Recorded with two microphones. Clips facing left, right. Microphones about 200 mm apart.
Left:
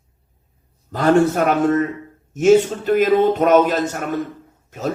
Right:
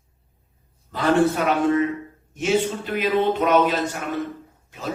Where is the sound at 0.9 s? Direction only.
45° left (ahead or behind).